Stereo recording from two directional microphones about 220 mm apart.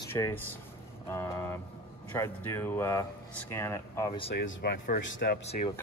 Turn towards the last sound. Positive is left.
turn(degrees=50)  # may be behind; listen again after turning